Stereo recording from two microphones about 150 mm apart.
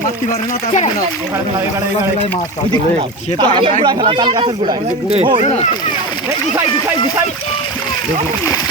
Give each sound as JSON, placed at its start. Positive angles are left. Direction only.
{"t": 3.3, "sound": "speech", "side_deg": -35}